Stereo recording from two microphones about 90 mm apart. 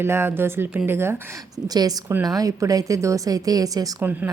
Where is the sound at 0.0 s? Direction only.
25° right (ahead or behind).